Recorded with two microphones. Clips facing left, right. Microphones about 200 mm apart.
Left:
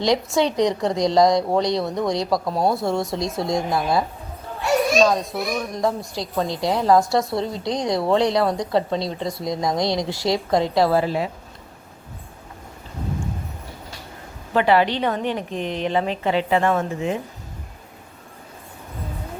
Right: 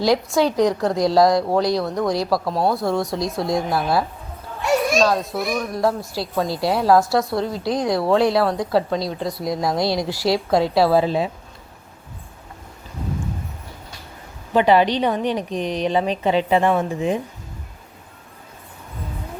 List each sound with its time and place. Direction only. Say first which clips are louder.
0.0 s a child's voice: right 2 dB; centre (ahead or behind)
10.0 s a woman's voice: right 2 dB; 20° left (ahead or behind)
10.3 s a woman's voice: right 1 dB; 10° right (ahead or behind)
11.0 s a woman's voice: right 2 dB; 20° right (ahead or behind)
14.5 s a woman's voice: right 2 dB; 20° right (ahead or behind)